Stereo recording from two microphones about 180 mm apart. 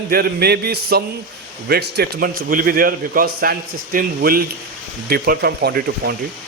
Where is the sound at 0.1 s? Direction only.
60° right (ahead or behind).